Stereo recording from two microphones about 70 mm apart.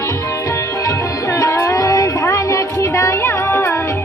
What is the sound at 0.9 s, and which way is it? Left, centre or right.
Music, left.